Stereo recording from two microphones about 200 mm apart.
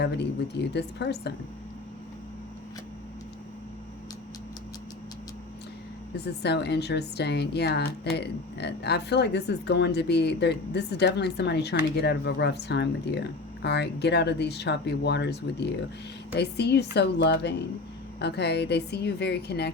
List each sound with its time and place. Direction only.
0.0 s speech: 60° left (ahead or behind)
6.1 s speech: 55° left (ahead or behind)